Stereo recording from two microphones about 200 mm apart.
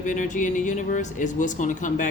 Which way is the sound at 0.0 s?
40° left (ahead or behind).